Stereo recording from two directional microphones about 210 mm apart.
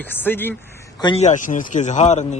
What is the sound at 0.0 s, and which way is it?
Speech, 10° left (ahead or behind).